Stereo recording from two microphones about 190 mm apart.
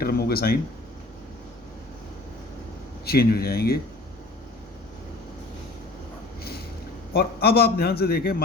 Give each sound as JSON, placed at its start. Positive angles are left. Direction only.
{"t": 0.0, "sound": "speech", "side_deg": 50}
{"t": 3.1, "sound": "speech", "side_deg": 55}
{"t": 7.1, "sound": "a man's voice", "side_deg": 55}